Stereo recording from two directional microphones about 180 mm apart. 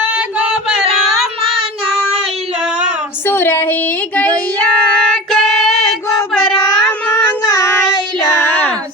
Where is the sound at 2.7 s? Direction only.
40° right (ahead or behind).